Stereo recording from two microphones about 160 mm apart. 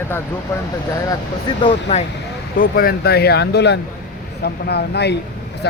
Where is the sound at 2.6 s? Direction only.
65° left (ahead or behind).